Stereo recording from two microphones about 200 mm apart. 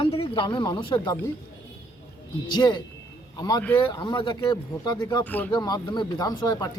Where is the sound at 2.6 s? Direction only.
20° left (ahead or behind).